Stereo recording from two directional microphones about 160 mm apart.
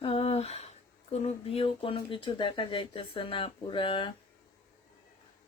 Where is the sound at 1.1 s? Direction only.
40° left (ahead or behind).